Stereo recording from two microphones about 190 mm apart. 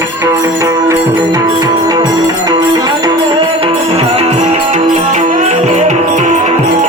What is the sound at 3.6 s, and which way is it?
Music, 30° right (ahead or behind).